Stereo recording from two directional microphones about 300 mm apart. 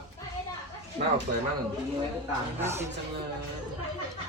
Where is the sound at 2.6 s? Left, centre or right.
Centre.